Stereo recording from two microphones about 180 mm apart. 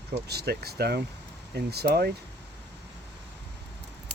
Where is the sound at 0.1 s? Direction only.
60° right (ahead or behind).